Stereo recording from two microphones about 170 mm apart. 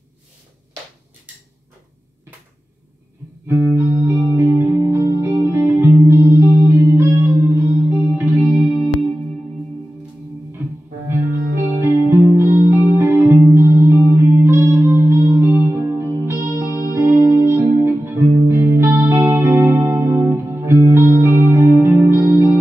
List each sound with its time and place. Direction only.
3.4 s music: 15° right (ahead or behind)
11.8 s music: 15° right (ahead or behind)
16.6 s music: 20° left (ahead or behind)
16.9 s music: 15° right (ahead or behind)